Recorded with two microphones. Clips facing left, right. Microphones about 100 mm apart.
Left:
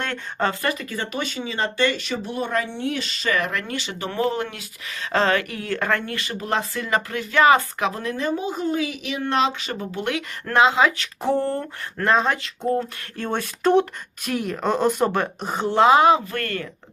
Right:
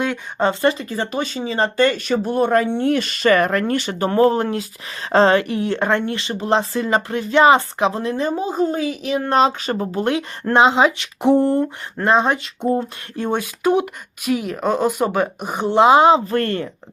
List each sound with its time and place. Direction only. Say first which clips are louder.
0.0 s a woman's voice: right 5 dB; 15° right (ahead or behind)